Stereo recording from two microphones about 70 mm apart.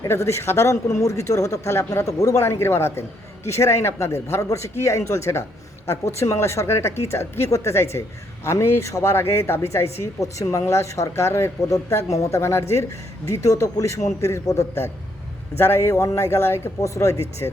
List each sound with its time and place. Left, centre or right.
0.1 s speech: left
9.1 s speech: left
12.4 s speech: left
15.5 s speech: left
16.8 s speech: left